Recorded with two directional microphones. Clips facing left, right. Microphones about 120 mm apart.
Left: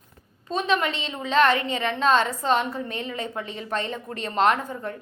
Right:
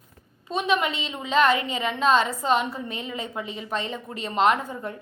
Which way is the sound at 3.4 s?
40° left (ahead or behind).